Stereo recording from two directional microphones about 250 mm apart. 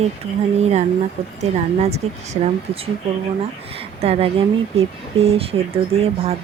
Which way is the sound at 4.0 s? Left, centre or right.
Right.